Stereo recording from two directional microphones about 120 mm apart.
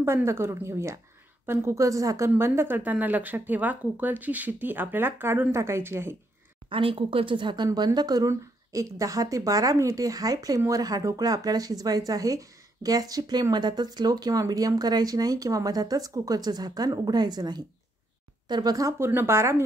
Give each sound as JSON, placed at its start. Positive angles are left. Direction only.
{"t": 0.0, "sound": "a woman's voice", "side_deg": -20}
{"t": 6.7, "sound": "speech", "side_deg": -50}